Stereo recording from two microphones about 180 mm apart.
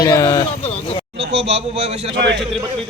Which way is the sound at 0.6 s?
35° left (ahead or behind).